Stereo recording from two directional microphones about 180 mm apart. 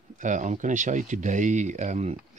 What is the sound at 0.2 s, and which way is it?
Speech, 45° right (ahead or behind).